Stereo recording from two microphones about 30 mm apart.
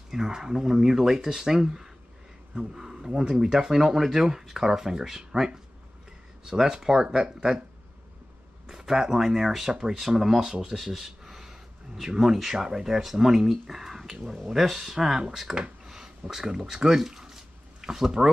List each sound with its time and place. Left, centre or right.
0.1 s speech: centre
8.6 s speech: centre
9.7 s speech: right
9.9 s speech: centre
10.5 s speech: right
10.8 s speech: centre
12.5 s speech: centre
13.0 s speech: centre